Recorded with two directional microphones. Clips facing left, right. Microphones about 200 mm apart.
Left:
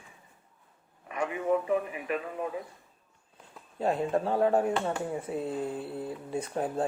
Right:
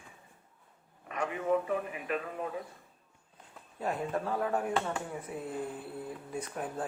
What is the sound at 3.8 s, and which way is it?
Speech, 25° left (ahead or behind).